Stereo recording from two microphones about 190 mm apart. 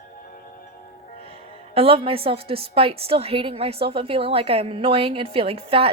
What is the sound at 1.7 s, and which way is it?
A woman's voice, 30° right (ahead or behind).